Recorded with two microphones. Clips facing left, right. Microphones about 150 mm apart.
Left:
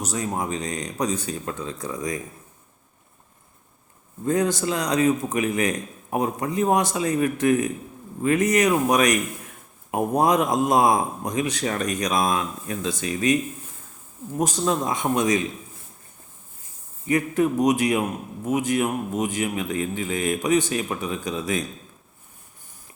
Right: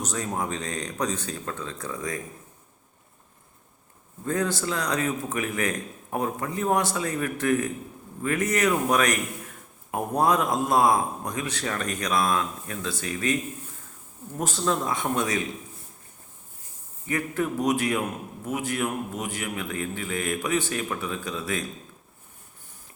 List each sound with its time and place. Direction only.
0.0 s speech: 10° left (ahead or behind)
4.3 s a man's voice: 15° left (ahead or behind)
14.3 s speech: 15° left (ahead or behind)
17.1 s a man's voice: 15° left (ahead or behind)